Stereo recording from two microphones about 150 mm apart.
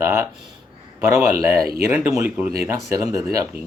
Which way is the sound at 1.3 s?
85° right.